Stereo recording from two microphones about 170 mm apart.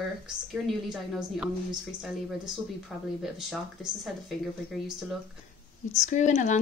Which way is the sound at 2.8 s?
Centre (ahead or behind).